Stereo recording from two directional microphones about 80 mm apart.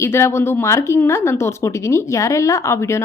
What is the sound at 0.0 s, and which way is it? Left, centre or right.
A woman's voice, left.